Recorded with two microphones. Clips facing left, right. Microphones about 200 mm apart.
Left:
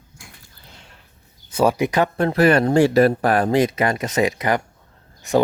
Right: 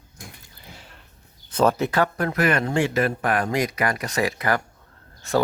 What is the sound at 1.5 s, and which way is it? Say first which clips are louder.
Speech: left 2 dB; 10° left (ahead or behind).